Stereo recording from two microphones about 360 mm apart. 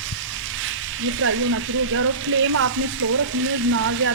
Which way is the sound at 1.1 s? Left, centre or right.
Right.